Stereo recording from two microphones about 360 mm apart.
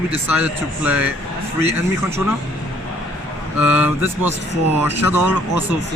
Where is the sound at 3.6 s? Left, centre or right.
Centre.